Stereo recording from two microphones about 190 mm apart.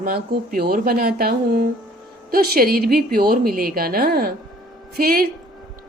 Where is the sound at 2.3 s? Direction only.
50° right (ahead or behind).